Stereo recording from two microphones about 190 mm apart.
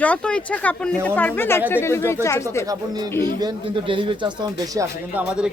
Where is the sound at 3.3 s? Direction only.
25° right (ahead or behind).